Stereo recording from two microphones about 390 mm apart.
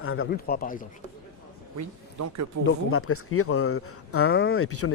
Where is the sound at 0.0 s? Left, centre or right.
Left.